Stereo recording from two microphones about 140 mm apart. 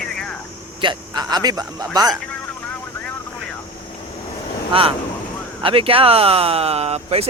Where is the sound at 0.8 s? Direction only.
35° right (ahead or behind).